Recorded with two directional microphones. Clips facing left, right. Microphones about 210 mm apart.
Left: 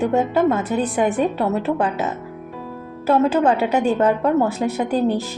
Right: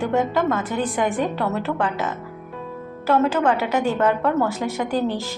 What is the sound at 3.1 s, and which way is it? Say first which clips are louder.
Speech: left 2 dB; 35° left (ahead or behind).